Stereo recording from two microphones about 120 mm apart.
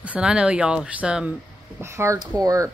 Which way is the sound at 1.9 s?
25° right (ahead or behind).